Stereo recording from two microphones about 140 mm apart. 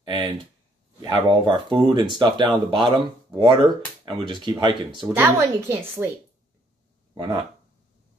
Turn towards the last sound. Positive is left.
turn(degrees=-30)  # may be behind; listen again after turning